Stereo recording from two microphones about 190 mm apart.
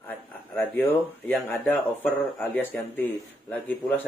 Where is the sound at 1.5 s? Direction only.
10° left (ahead or behind).